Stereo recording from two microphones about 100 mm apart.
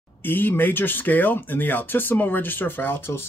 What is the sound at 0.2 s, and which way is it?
Speech, 20° left (ahead or behind).